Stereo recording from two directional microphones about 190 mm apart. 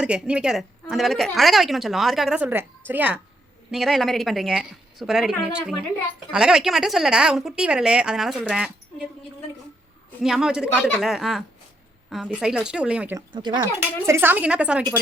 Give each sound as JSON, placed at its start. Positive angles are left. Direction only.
{"t": 0.0, "sound": "a woman's voice", "side_deg": -5}
{"t": 10.2, "sound": "a woman's voice", "side_deg": -5}
{"t": 13.1, "sound": "speech", "side_deg": -25}
{"t": 13.7, "sound": "speech", "side_deg": -10}